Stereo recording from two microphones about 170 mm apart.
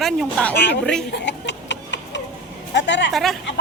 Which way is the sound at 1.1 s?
90° left.